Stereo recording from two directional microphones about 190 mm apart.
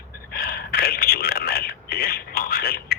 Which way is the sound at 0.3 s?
50° left (ahead or behind).